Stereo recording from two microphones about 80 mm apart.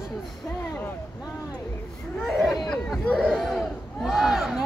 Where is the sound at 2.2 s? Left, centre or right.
Centre.